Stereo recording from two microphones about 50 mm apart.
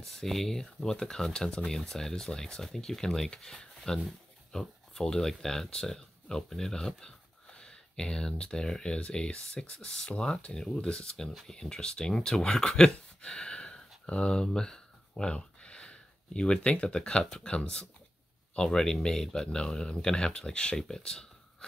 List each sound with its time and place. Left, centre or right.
0.0 s speech: centre
17.2 s speech: centre
17.5 s speech: left